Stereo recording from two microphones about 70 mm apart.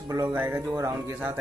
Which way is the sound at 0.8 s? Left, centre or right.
Right.